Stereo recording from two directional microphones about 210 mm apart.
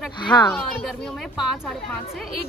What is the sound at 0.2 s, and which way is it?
Speech, 20° left (ahead or behind).